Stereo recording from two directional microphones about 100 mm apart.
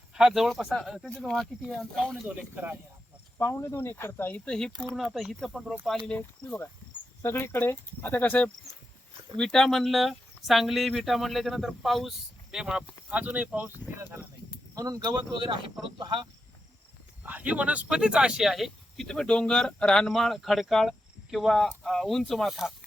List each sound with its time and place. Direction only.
0.1 s speech: 5° right (ahead or behind)
2.2 s speech: 20° right (ahead or behind)
3.3 s speech: 30° left (ahead or behind)
4.4 s speech: 10° left (ahead or behind)
6.1 s speech: 15° left (ahead or behind)
9.4 s speech: 5° left (ahead or behind); by 13.7 s 15° right (ahead or behind)
14.8 s speech: 40° right (ahead or behind); by 16.3 s 55° right (ahead or behind)
17.2 s speech: 15° right (ahead or behind)